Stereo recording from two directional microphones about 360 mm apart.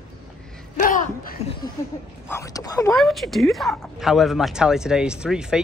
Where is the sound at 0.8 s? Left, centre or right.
Left.